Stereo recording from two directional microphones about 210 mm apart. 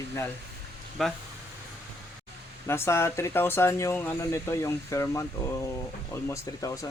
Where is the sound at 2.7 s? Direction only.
10° left (ahead or behind).